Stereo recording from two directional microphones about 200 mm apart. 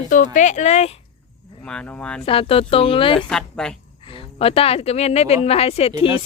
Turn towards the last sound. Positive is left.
turn(degrees=30)  # may be behind; listen again after turning